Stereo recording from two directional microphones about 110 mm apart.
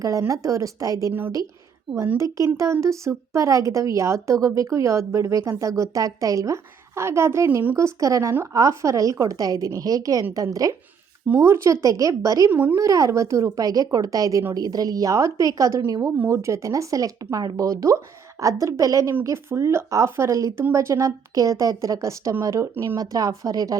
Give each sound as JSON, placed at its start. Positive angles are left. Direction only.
{"t": 0.0, "sound": "a woman's voice", "side_deg": -30}
{"t": 1.9, "sound": "a woman's voice", "side_deg": -50}
{"t": 2.6, "sound": "a woman's voice", "side_deg": -25}
{"t": 12.5, "sound": "speech", "side_deg": -15}
{"t": 12.7, "sound": "a woman's voice", "side_deg": -30}
{"t": 23.0, "sound": "a woman's voice", "side_deg": -35}